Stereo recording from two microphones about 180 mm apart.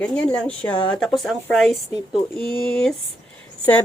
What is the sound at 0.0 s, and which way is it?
Speech, 5° left (ahead or behind).